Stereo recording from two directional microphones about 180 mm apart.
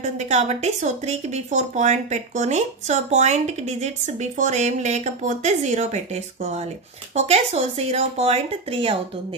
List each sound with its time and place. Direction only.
0.0 s speech: 40° right (ahead or behind)